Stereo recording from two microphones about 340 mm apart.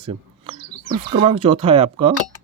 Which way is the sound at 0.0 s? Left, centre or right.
Centre.